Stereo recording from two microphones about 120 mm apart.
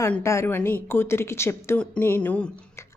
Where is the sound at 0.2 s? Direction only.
25° left (ahead or behind).